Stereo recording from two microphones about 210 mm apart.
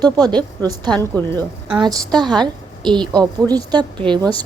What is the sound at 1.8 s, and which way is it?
Speech, 20° right (ahead or behind).